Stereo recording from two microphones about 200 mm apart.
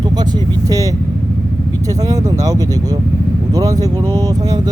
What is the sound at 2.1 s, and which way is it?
Speech, 20° right (ahead or behind).